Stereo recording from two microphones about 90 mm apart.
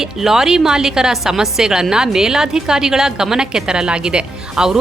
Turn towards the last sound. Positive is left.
turn(degrees=-10)  # may be behind; listen again after turning